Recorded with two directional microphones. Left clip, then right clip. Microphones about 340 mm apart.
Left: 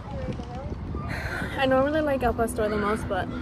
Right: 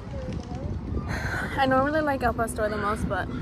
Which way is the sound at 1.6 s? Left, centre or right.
Centre.